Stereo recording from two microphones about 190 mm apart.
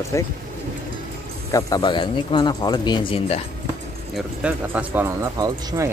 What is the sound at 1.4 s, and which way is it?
Speech, 20° left (ahead or behind).